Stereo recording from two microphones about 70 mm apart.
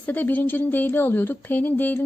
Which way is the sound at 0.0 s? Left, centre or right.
Left.